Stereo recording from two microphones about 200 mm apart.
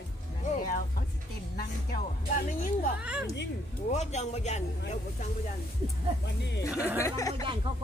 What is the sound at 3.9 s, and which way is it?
Speech, 35° left (ahead or behind).